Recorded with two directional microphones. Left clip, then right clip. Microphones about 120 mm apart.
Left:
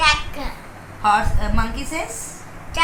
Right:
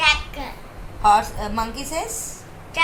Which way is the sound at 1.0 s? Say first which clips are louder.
Right 1 dB; 80° right.